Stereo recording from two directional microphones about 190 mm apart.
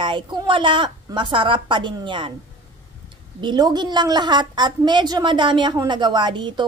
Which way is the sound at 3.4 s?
20° right (ahead or behind).